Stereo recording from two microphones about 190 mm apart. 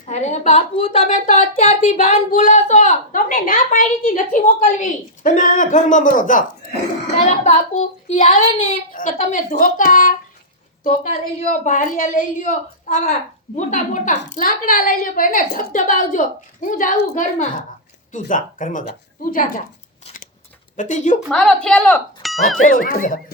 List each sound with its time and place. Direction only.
0.1 s a woman's voice: 40° left (ahead or behind)
7.4 s a woman's voice: 35° left (ahead or behind)
11.3 s a woman's voice: 40° left (ahead or behind)
20.7 s a woman's voice: 40° left (ahead or behind)
21.2 s speech: 5° left (ahead or behind)
22.2 s a sound: centre (ahead or behind)
22.7 s a woman's voice: 45° left (ahead or behind)